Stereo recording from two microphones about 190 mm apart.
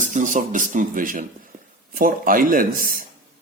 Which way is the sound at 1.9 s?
45° right (ahead or behind).